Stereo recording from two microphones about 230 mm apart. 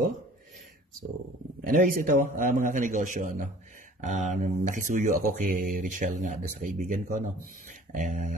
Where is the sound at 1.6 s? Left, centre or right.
Right.